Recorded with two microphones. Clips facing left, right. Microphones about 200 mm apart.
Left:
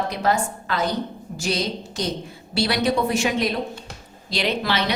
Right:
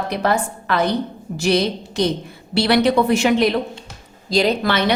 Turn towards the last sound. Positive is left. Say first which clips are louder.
# right 5 dB
turn(degrees=-55)  # may be behind; listen again after turning